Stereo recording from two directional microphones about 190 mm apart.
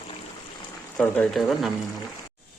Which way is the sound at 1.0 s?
5° left (ahead or behind).